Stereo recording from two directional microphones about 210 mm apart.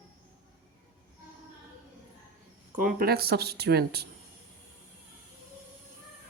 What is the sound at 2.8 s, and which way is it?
Speech, 40° right (ahead or behind).